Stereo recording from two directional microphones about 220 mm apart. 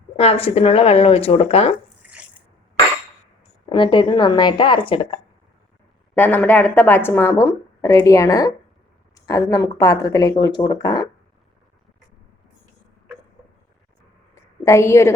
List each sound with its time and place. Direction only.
0.2 s speech: 25° left (ahead or behind)
3.7 s speech: 20° left (ahead or behind)
6.1 s speech: 10° left (ahead or behind)
14.6 s speech: 15° left (ahead or behind)